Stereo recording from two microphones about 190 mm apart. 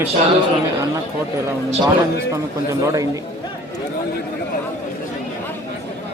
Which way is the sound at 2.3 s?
15° right (ahead or behind).